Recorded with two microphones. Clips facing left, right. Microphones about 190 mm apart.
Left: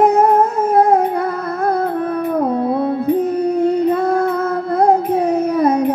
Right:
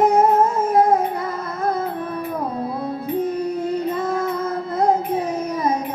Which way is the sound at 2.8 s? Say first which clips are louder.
Left 7 dB; 65° left (ahead or behind).